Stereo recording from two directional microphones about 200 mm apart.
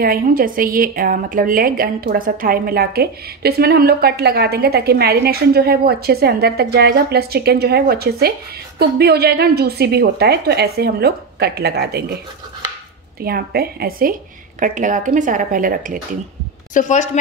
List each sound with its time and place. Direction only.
0.0 s a woman's voice: 45° right (ahead or behind)
13.2 s a woman's voice: 50° right (ahead or behind)
16.7 s speech: 35° left (ahead or behind)